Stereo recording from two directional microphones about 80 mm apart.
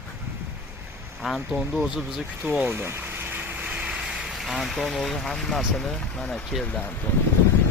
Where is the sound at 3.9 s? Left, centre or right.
Centre.